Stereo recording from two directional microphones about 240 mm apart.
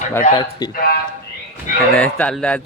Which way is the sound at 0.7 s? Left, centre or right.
Left.